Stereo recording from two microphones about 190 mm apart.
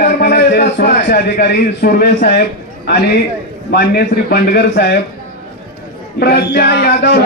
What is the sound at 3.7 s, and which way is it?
A man's voice, 60° left (ahead or behind).